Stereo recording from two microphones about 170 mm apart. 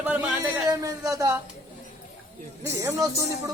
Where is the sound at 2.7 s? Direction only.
20° right (ahead or behind).